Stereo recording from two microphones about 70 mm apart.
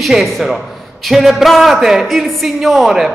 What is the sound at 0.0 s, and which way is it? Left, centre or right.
A woman's voice, centre.